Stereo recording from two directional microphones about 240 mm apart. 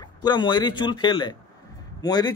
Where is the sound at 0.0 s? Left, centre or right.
Centre.